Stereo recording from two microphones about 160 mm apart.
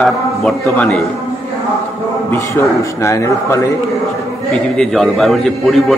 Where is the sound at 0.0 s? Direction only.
5° left (ahead or behind).